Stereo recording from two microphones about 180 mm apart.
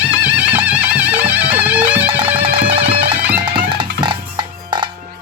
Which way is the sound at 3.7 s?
25° right (ahead or behind).